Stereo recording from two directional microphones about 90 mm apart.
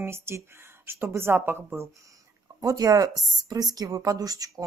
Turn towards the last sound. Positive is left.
turn(degrees=-45)  # may be behind; listen again after turning